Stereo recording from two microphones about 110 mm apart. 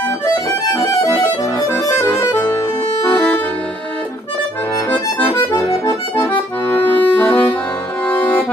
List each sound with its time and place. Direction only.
1.2 s accordion: 25° left (ahead or behind)
5.2 s accordion: 20° left (ahead or behind)